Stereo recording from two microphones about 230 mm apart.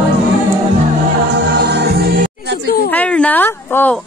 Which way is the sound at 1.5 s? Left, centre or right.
Right.